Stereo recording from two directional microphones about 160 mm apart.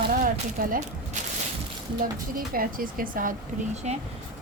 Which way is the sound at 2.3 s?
60° right (ahead or behind).